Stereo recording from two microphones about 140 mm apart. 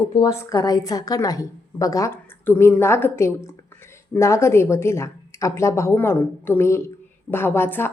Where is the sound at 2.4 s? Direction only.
10° left (ahead or behind).